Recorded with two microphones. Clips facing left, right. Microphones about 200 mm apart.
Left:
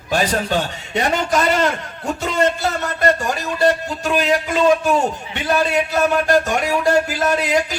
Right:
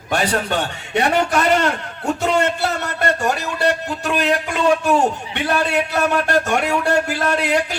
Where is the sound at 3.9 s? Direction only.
60° right (ahead or behind).